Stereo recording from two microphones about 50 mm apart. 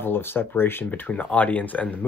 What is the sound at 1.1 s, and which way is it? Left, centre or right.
Speech, left.